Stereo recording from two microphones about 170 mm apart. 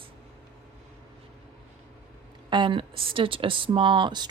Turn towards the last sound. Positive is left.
turn(degrees=-25)  # may be behind; listen again after turning